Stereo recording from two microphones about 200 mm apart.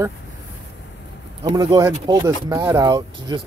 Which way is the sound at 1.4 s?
20° right (ahead or behind).